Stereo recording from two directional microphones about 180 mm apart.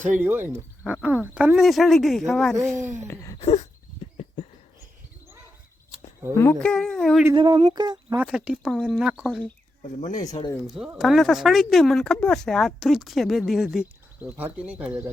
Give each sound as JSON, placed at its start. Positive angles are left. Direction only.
{"t": 0.1, "sound": "speech", "side_deg": -10}
{"t": 3.1, "sound": "a sound", "side_deg": 20}
{"t": 3.4, "sound": "a sound", "side_deg": 40}
{"t": 6.3, "sound": "speech", "side_deg": 15}
{"t": 7.3, "sound": "speech", "side_deg": -25}
{"t": 8.2, "sound": "speech", "side_deg": -5}
{"t": 9.8, "sound": "speech", "side_deg": 45}
{"t": 10.8, "sound": "speech", "side_deg": 0}